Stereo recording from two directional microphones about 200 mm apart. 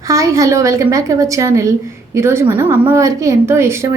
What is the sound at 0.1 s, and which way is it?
A woman's voice, 15° right (ahead or behind).